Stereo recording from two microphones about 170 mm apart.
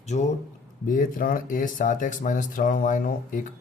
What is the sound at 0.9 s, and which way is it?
Mantra, 55° left (ahead or behind).